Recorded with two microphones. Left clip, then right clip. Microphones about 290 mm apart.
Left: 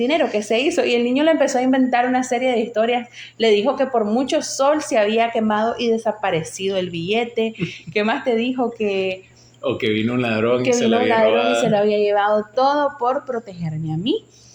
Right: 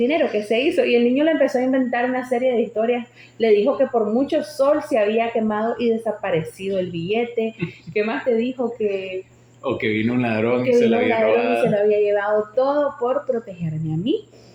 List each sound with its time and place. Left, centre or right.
0.0 s speech: left